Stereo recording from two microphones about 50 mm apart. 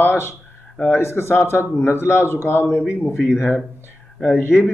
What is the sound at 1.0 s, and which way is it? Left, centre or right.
A man's voice, left.